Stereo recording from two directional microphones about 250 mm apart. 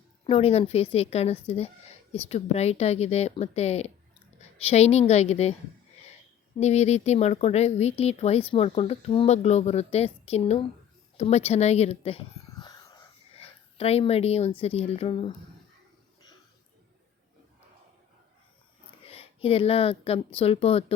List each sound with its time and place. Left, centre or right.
0.3 s a woman's voice: left
6.6 s a woman's voice: left
19.1 s speech: left